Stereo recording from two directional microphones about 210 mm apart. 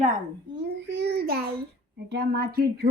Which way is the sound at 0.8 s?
55° right (ahead or behind).